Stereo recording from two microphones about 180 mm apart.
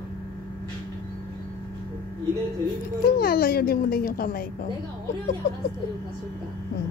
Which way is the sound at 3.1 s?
60° left (ahead or behind).